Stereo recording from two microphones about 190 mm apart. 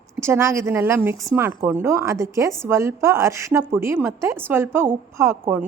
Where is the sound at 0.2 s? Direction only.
15° right (ahead or behind).